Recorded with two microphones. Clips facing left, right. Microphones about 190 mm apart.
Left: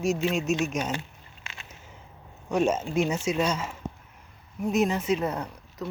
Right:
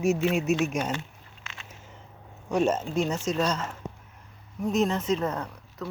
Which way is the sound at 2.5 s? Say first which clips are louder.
Even; 5° left (ahead or behind).